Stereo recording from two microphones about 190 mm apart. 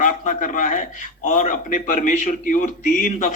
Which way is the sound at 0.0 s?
45° left (ahead or behind).